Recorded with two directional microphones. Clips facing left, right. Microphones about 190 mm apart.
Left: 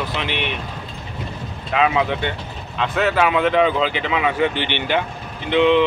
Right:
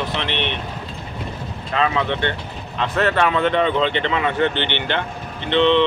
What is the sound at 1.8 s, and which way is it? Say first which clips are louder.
Speech: left 2 dB; 10° left (ahead or behind).